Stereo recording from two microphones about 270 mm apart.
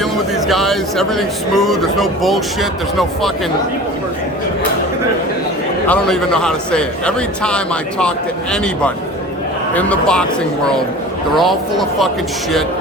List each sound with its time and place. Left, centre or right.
0.0 s speech: centre
5.9 s speech: centre
9.7 s speech: centre
11.3 s speech: centre